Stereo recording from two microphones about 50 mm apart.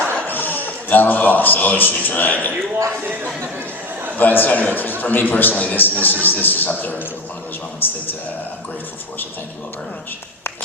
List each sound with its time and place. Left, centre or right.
0.3 s a man's voice: left
4.2 s a man's voice: left